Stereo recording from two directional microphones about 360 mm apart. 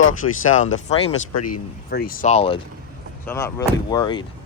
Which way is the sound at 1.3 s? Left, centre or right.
Left.